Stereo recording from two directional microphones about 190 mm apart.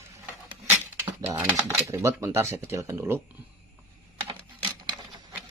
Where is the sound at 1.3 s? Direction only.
10° right (ahead or behind).